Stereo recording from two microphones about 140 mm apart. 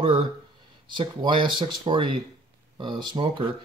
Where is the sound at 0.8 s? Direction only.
35° right (ahead or behind).